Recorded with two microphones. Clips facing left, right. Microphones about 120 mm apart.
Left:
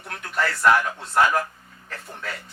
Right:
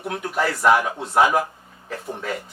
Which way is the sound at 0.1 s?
15° right (ahead or behind).